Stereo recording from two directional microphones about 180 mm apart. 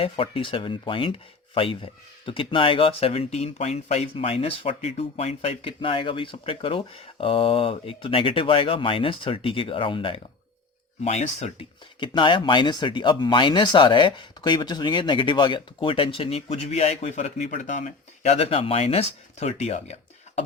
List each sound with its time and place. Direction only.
0.0 s speech: 30° left (ahead or behind)